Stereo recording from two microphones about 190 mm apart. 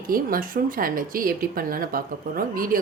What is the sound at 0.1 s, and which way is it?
Speech, 50° right (ahead or behind).